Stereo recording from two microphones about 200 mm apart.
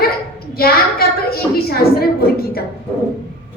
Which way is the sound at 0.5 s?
50° left (ahead or behind).